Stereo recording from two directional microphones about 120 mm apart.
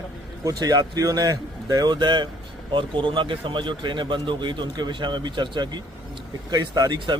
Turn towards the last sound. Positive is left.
turn(degrees=-35)  # may be behind; listen again after turning